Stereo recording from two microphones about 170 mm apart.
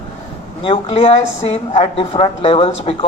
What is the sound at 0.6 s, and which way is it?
A woman's voice, 35° left (ahead or behind).